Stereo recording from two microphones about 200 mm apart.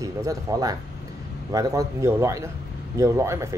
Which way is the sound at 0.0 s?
15° right (ahead or behind).